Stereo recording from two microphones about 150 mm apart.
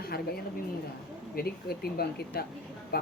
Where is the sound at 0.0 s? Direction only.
90° left.